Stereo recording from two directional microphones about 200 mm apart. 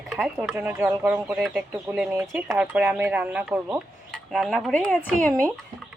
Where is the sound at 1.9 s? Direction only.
10° right (ahead or behind).